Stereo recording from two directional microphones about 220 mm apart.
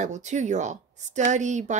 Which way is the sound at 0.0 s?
35° right (ahead or behind).